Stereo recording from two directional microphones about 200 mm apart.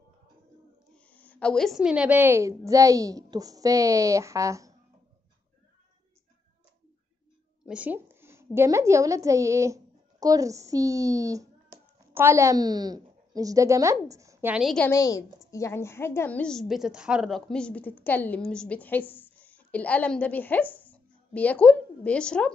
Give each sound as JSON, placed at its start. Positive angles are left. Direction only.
{"t": 0.9, "sound": "a woman's voice", "side_deg": 5}
{"t": 7.6, "sound": "a sound", "side_deg": -5}
{"t": 8.5, "sound": "a woman's voice", "side_deg": -15}
{"t": 14.9, "sound": "a woman's voice", "side_deg": 15}